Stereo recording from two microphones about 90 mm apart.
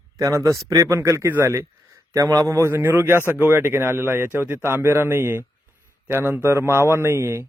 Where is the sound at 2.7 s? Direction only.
25° right (ahead or behind).